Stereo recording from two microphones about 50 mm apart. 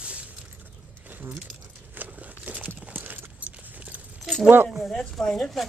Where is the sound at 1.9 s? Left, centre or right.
Right.